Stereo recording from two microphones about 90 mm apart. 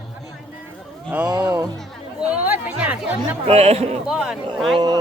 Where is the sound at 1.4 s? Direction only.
35° right (ahead or behind).